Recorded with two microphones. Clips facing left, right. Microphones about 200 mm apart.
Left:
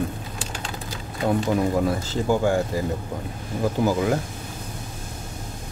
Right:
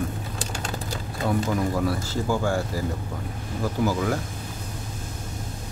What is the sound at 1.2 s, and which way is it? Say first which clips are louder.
Speech: left 3 dB; 25° left (ahead or behind).